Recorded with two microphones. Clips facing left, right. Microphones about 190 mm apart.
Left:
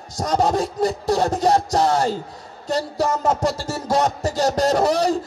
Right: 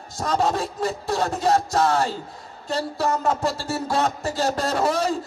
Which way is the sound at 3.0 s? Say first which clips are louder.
Left 2 dB; 40° left (ahead or behind).